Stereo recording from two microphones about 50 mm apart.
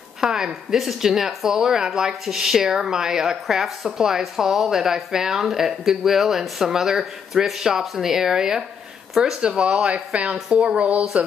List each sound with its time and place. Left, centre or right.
0.2 s speech: centre
9.7 s speech: centre
9.9 s speech: right